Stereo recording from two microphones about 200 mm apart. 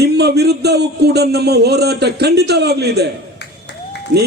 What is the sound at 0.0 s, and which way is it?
A man's voice, 55° right (ahead or behind).